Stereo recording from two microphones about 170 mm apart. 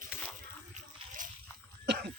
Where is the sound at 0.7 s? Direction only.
45° right (ahead or behind).